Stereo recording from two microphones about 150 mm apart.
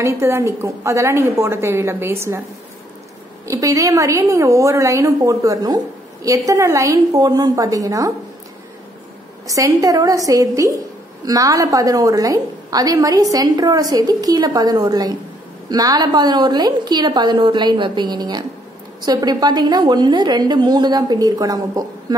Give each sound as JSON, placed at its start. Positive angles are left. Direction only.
{"t": 0.0, "sound": "a woman's voice", "side_deg": -15}
{"t": 3.4, "sound": "a woman's voice", "side_deg": -20}
{"t": 9.5, "sound": "a woman's voice", "side_deg": -25}